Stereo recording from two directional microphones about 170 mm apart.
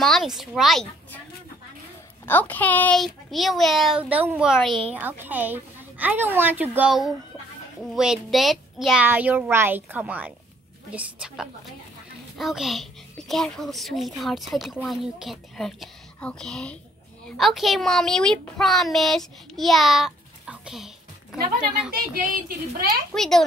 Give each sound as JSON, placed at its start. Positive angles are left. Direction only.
{"t": 0.0, "sound": "a sound", "side_deg": 0}
{"t": 0.4, "sound": "a child's voice", "side_deg": 0}
{"t": 2.2, "sound": "a child's voice", "side_deg": 10}
{"t": 4.9, "sound": "a child's voice", "side_deg": -10}
{"t": 21.9, "sound": "speech", "side_deg": -55}
{"t": 23.1, "sound": "a child's voice", "side_deg": 0}